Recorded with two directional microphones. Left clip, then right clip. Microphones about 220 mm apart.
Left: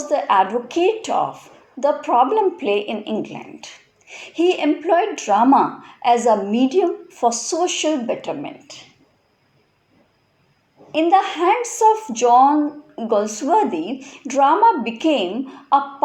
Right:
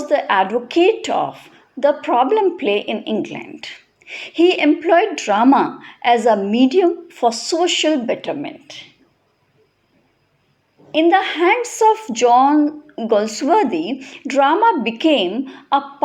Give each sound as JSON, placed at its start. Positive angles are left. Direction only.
{"t": 0.1, "sound": "a woman's voice", "side_deg": -35}
{"t": 10.9, "sound": "a woman's voice", "side_deg": -35}